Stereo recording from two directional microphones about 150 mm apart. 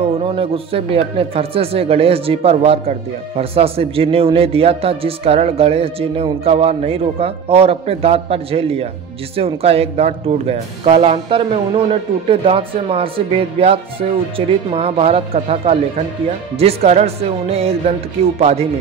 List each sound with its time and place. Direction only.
0.2 s speech: 35° right (ahead or behind)